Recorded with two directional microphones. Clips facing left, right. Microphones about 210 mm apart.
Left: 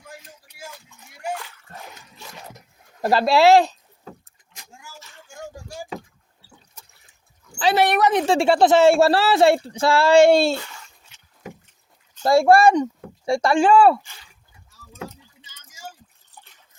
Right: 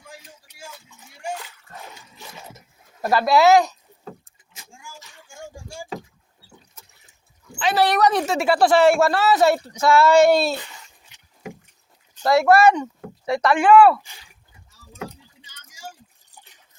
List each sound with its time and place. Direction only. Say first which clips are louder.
3.0 s speech: left 1 dB; 30° left (ahead or behind)
7.8 s a woman's voice: right 1 dB; 15° left (ahead or behind)
8.3 s speech: left 2 dB; 30° left (ahead or behind)
12.2 s speech: left 1 dB; 30° left (ahead or behind)